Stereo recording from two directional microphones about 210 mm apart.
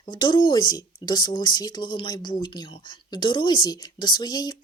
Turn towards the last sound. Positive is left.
turn(degrees=20)  # may be behind; listen again after turning